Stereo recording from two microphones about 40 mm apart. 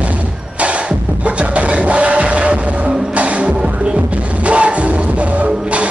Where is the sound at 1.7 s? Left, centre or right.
Right.